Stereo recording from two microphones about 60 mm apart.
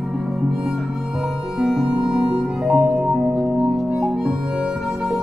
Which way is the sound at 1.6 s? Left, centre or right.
Centre.